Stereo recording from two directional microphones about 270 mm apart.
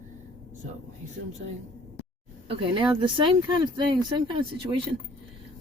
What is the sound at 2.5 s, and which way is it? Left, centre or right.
Speech, centre.